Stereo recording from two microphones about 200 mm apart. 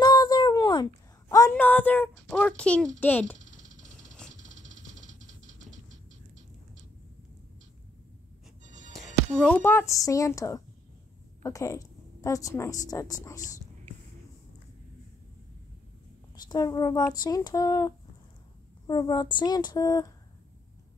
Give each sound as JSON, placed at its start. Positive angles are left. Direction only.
{"t": 0.0, "sound": "a sound", "side_deg": 20}
{"t": 1.3, "sound": "a child's voice", "side_deg": 10}
{"t": 3.3, "sound": "a sound", "side_deg": -40}
{"t": 8.6, "sound": "music", "side_deg": -40}
{"t": 8.9, "sound": "a woman's voice", "side_deg": 5}
{"t": 16.4, "sound": "speech", "side_deg": 20}